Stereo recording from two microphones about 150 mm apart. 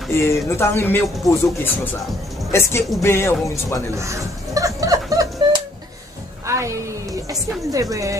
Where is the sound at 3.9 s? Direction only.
20° right (ahead or behind).